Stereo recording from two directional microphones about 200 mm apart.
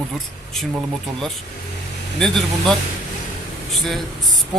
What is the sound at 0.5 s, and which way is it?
Speech, centre (ahead or behind).